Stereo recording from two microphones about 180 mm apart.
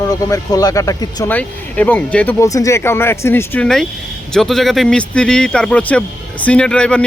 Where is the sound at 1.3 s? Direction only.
10° left (ahead or behind).